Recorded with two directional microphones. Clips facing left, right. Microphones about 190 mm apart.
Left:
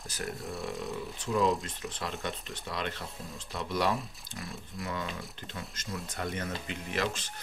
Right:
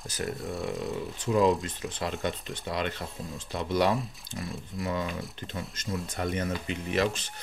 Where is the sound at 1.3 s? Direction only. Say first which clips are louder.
Right 4 dB; 20° right (ahead or behind).